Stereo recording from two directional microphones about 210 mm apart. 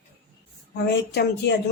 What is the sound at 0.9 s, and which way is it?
Speech, 50° left (ahead or behind).